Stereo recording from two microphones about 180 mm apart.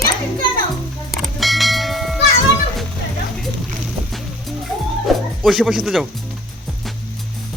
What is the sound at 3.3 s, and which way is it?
Music, centre (ahead or behind).